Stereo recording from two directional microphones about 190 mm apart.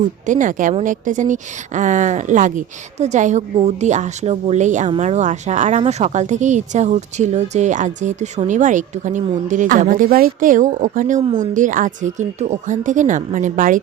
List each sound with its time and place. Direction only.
0.3 s speech: 45° right (ahead or behind)